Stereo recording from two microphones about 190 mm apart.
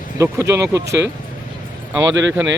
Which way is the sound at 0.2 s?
15° right (ahead or behind).